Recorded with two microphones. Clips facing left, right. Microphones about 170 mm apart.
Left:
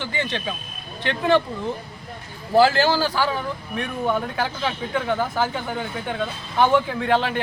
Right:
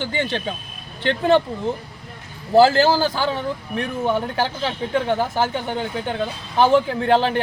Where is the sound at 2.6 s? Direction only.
30° right (ahead or behind).